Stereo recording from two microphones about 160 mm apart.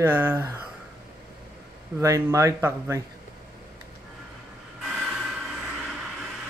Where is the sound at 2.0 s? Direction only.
20° right (ahead or behind).